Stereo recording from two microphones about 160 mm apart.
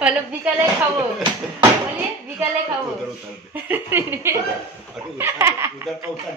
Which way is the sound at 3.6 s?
15° right (ahead or behind).